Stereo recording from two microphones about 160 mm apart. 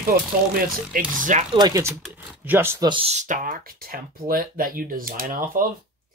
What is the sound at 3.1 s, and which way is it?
Speech, 50° right (ahead or behind).